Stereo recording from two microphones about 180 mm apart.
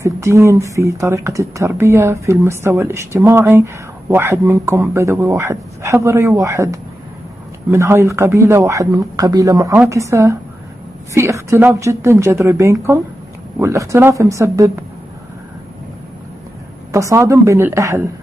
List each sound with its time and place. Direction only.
0.0 s a woman's voice: 15° right (ahead or behind)
16.9 s a woman's voice: 15° right (ahead or behind)